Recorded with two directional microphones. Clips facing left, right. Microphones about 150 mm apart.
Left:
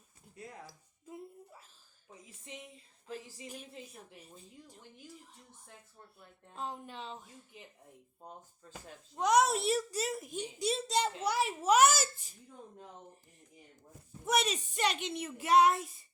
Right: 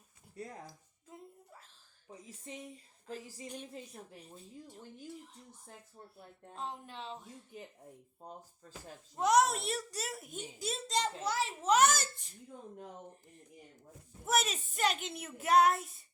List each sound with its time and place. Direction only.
0.3 s speech: 40° right (ahead or behind)
2.0 s speech: 35° right (ahead or behind)
5.6 s speech: 30° right (ahead or behind)
6.6 s a child's voice: centre (ahead or behind)
9.1 s a child's voice: centre (ahead or behind)
14.3 s a child's voice: centre (ahead or behind)